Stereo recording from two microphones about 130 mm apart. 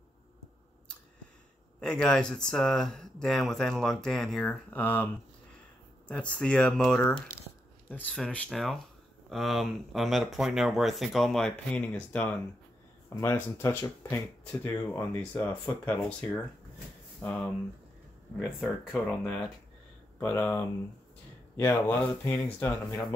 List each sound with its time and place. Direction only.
1.8 s speech: 5° left (ahead or behind)
11.7 s speech: 15° left (ahead or behind)
18.6 s speech: centre (ahead or behind)
20.2 s speech: 15° left (ahead or behind)